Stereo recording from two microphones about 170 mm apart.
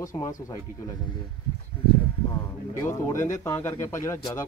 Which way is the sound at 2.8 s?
20° left (ahead or behind).